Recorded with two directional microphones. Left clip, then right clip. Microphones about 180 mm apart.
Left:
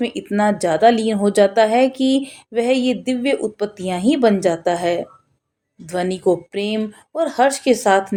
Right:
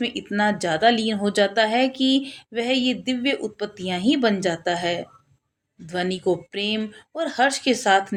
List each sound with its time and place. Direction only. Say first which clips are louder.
0.0 s a woman's voice: left 4 dB; 45° left (ahead or behind)